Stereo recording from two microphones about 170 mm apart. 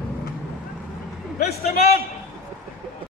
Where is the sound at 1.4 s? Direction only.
65° left (ahead or behind).